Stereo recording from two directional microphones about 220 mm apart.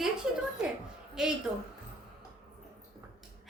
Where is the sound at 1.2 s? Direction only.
5° right (ahead or behind).